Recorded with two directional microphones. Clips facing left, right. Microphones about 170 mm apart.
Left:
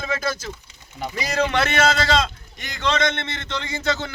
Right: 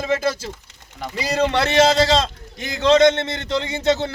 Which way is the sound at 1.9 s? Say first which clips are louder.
Right 4 dB; 35° right (ahead or behind).